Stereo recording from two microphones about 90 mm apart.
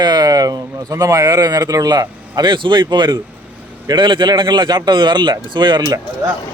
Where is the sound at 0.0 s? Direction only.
45° right (ahead or behind).